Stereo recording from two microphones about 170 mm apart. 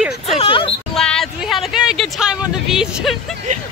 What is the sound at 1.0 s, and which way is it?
Speech, 5° left (ahead or behind).